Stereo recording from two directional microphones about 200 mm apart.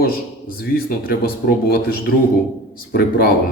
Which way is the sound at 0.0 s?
50° left (ahead or behind).